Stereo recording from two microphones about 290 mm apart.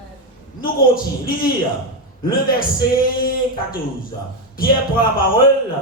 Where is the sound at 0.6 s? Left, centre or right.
Left.